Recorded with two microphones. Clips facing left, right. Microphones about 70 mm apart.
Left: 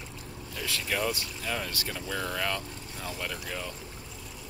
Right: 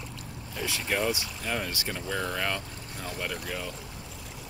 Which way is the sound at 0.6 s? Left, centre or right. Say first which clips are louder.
Right 2 dB; centre.